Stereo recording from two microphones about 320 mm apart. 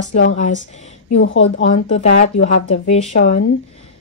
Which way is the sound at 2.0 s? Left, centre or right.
Centre.